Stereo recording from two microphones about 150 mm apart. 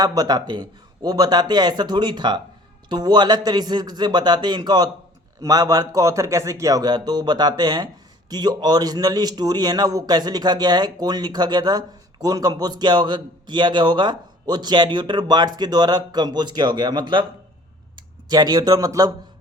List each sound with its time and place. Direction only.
0.0 s a man's voice: 25° right (ahead or behind)